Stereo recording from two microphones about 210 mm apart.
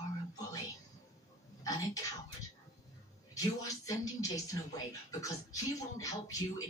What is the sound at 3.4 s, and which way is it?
Speech, 15° left (ahead or behind).